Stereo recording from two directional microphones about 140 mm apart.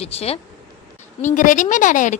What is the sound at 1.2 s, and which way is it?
Speech, 65° left (ahead or behind).